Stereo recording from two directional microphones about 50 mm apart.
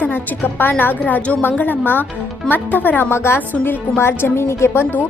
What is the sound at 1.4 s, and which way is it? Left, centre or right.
A woman's voice, left.